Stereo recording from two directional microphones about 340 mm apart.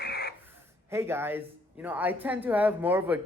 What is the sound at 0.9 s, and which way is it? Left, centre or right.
Speech, centre.